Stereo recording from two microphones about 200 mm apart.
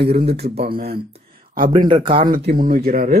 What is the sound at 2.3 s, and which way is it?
Speech, 45° right (ahead or behind).